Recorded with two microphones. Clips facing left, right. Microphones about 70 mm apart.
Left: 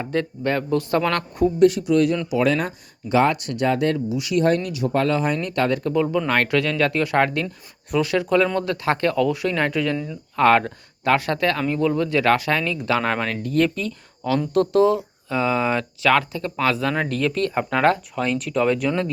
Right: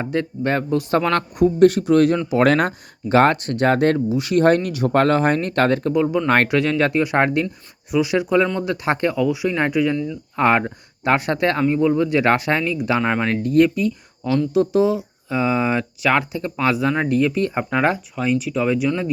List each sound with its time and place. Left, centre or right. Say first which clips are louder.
0.0 s speech: right 1 dB; right
1.5 s speech: right 3 dB; right
2.4 s speech: right 6 dB; right
3.7 s speech: right 4 dB; right
3.9 s speech: right 4 dB; right
4.4 s speech: right 4 dB; right
5.9 s speech: right 2 dB; centre
6.2 s speech: right 3 dB; right
7.9 s speech: right 2 dB; centre
8.1 s speech: even; centre
12.7 s speech: right 2 dB; centre
13.2 s speech: right 5 dB; right
13.6 s speech: right 5 dB; centre